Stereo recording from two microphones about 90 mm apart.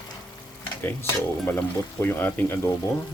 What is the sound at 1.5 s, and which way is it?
Sizzle, 20° left (ahead or behind).